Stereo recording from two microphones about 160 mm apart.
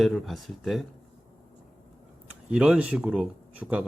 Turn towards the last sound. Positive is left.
turn(degrees=-10)  # may be behind; listen again after turning